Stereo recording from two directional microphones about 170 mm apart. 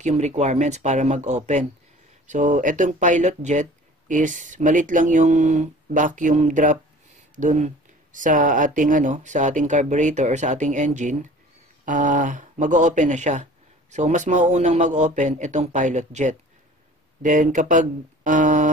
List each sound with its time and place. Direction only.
0.0 s speech: 40° right (ahead or behind)